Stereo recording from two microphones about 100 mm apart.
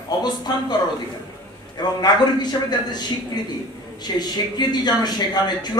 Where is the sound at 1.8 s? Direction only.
45° left (ahead or behind).